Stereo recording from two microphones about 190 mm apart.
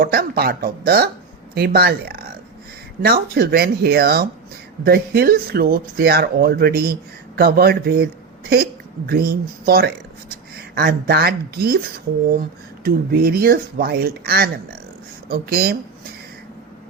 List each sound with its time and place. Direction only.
0.0 s speech: 55° right (ahead or behind)